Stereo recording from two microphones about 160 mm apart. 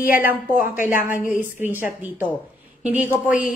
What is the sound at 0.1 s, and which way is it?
Speech, 10° right (ahead or behind).